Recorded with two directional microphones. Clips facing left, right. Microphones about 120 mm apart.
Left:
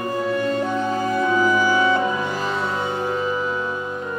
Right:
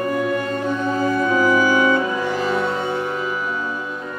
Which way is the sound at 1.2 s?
25° left (ahead or behind).